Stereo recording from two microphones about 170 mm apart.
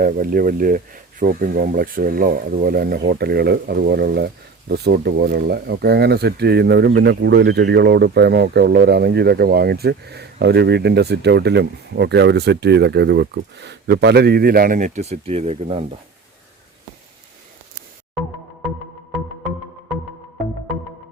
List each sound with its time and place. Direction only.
0.0 s speech: 55° right (ahead or behind); by 15.8 s 35° right (ahead or behind)